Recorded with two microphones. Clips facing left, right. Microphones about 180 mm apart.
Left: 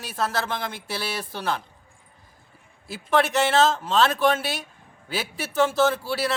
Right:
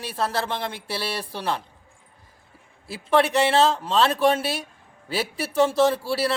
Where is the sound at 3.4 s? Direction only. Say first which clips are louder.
Right 1 dB; 30° right (ahead or behind).